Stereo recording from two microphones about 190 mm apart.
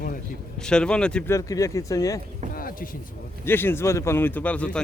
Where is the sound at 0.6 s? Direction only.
5° left (ahead or behind).